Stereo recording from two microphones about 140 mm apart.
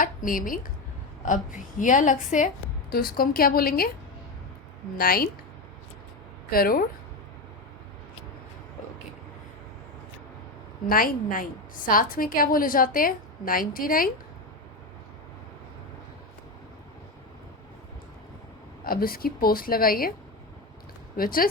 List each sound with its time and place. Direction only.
0.0 s a woman's voice: 75° left (ahead or behind)
1.2 s a woman's voice: 65° left (ahead or behind)
2.9 s a woman's voice: 90° left
4.9 s a woman's voice: 90° left
6.5 s a woman's voice: 90° left
10.8 s a woman's voice: 90° left
18.9 s a woman's voice: 90° left
21.2 s a woman's voice: 90° left